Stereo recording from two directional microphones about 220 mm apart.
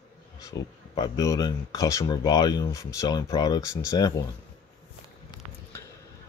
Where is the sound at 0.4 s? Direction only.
15° left (ahead or behind).